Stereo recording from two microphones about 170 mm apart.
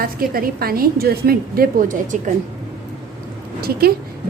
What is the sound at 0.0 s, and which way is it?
A woman's voice, 60° right (ahead or behind).